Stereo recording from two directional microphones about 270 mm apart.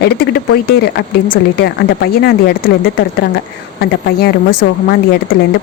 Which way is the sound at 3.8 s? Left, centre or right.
Left.